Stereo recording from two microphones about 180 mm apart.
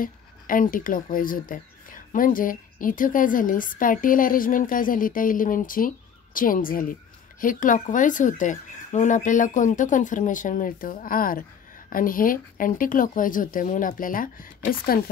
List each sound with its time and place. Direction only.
0.0 s speech: 50° left (ahead or behind)